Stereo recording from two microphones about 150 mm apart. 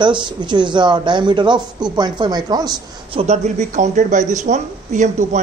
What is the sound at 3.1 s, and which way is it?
Speech, 50° right (ahead or behind).